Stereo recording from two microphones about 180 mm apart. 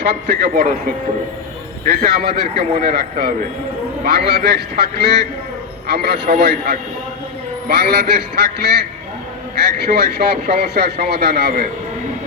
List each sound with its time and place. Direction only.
0.0 s speech: 60° right (ahead or behind)
2.0 s speech: 60° right (ahead or behind)